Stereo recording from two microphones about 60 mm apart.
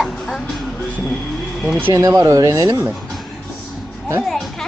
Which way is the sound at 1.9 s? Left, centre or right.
Right.